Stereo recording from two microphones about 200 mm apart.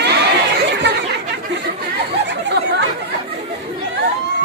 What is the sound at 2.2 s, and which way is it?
Chatter, 60° right (ahead or behind).